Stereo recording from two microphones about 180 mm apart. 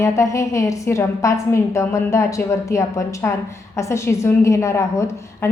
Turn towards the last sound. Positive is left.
turn(degrees=15)  # may be behind; listen again after turning